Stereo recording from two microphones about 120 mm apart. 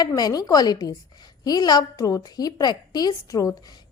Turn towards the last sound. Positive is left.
turn(degrees=30)  # may be behind; listen again after turning